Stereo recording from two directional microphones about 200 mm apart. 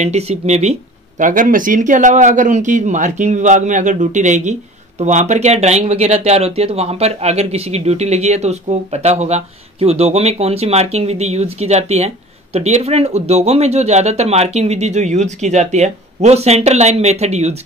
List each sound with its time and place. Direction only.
0.0 s speech: 30° right (ahead or behind)